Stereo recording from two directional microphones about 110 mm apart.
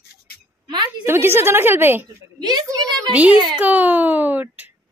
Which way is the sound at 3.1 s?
10° right (ahead or behind).